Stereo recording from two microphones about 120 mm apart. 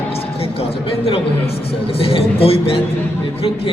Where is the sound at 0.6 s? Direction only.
55° left (ahead or behind).